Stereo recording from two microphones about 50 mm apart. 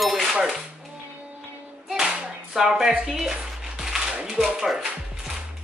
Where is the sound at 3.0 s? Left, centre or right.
Centre.